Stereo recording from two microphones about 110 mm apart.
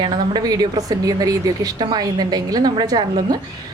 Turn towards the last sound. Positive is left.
turn(degrees=-35)  # may be behind; listen again after turning